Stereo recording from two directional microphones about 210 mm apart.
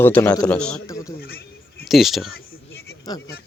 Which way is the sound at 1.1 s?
45° left (ahead or behind).